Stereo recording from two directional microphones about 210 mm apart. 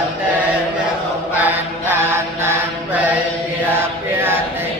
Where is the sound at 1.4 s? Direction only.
10° right (ahead or behind).